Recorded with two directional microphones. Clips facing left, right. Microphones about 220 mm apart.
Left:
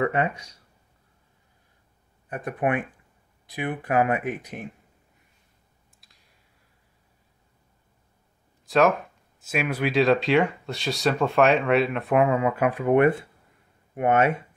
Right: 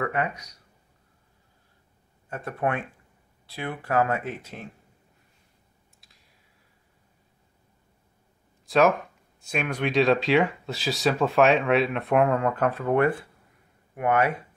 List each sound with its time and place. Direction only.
0.0 s speech: 25° left (ahead or behind)
2.2 s speech: 15° left (ahead or behind)
5.9 s clicking: centre (ahead or behind)
8.6 s speech: centre (ahead or behind); by 14.4 s 25° left (ahead or behind)